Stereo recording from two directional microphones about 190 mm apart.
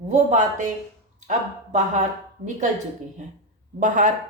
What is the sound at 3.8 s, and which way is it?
Speech, 40° right (ahead or behind).